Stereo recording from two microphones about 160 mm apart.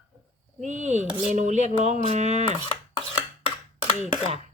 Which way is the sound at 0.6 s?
50° right (ahead or behind).